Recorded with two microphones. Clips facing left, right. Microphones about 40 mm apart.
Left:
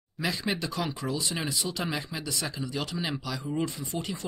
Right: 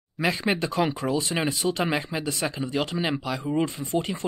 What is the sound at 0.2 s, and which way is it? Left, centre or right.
Speech, right.